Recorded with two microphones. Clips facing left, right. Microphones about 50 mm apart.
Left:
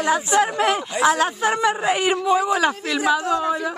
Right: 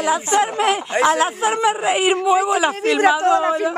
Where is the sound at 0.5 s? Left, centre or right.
Right.